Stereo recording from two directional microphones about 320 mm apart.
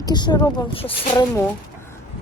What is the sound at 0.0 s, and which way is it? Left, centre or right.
Speech, centre.